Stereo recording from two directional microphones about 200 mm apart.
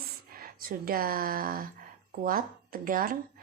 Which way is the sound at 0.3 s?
45° right (ahead or behind).